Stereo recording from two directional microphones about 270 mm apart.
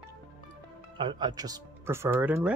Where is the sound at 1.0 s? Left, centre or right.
Centre.